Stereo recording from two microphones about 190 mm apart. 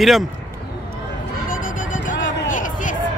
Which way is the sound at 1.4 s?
45° left (ahead or behind).